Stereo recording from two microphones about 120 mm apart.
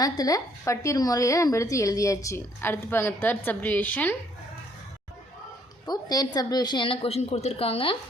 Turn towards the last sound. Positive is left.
turn(degrees=50)  # may be behind; listen again after turning